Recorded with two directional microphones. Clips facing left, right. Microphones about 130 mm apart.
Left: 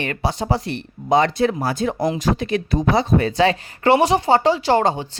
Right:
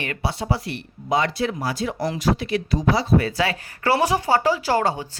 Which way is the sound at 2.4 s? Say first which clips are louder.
Left 3 dB; 45° left (ahead or behind).